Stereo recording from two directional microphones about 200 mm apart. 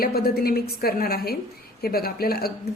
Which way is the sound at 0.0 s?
50° left (ahead or behind).